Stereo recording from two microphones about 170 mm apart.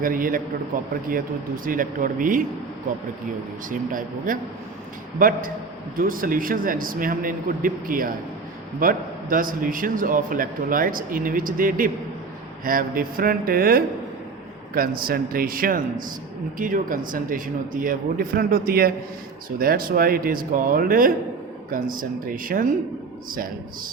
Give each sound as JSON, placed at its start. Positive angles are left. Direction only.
{"t": 0.0, "sound": "a man's voice", "side_deg": -55}
{"t": 3.7, "sound": "a man's voice", "side_deg": -50}